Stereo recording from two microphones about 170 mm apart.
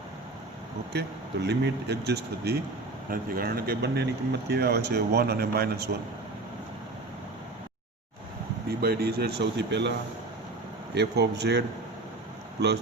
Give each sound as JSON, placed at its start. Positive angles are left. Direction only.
{"t": 0.9, "sound": "speech", "side_deg": -80}
{"t": 3.1, "sound": "speech", "side_deg": -60}
{"t": 8.8, "sound": "speech", "side_deg": -65}
{"t": 10.9, "sound": "speech", "side_deg": -80}